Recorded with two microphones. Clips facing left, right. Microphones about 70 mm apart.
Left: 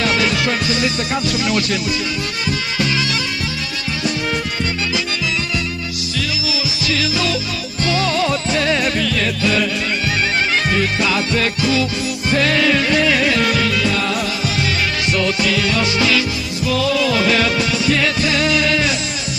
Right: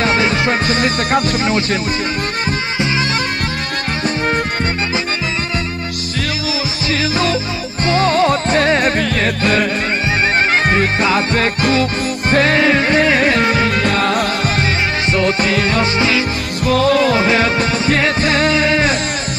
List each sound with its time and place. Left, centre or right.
0.0 s music: right
6.9 s music: right
15.1 s music: right
16.6 s music: right